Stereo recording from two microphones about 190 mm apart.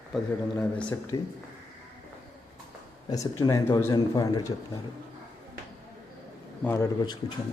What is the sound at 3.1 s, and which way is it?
A man's voice, 20° left (ahead or behind).